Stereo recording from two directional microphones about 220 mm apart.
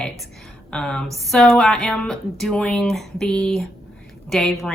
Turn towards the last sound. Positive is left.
turn(degrees=0)  # may be behind; listen again after turning